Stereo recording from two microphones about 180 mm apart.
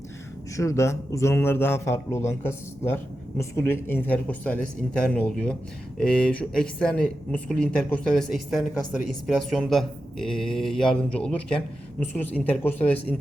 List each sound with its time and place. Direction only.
0.5 s a man's voice: 15° left (ahead or behind)